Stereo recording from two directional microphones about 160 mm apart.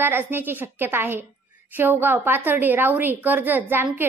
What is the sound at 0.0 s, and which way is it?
A woman's voice, 15° right (ahead or behind).